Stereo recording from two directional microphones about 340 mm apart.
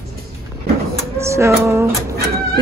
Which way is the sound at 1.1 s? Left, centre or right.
Centre.